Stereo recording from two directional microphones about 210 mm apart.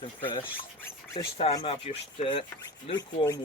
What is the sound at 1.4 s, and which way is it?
Speech, 20° left (ahead or behind).